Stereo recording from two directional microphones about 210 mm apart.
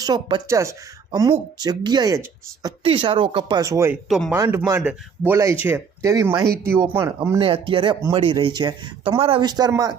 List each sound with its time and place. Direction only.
0.0 s speech: 20° right (ahead or behind)